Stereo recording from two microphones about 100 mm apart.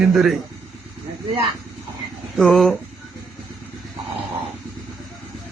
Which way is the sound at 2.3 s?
Centre (ahead or behind).